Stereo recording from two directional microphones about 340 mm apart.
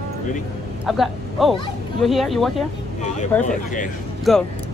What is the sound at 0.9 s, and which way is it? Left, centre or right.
Speech, centre.